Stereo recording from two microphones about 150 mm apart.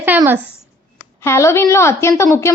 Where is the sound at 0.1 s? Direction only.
10° right (ahead or behind).